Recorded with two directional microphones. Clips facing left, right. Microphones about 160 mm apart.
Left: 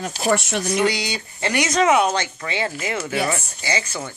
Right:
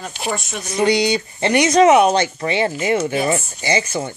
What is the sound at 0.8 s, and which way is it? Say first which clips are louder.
Speech: right 6 dB; 20° right (ahead or behind).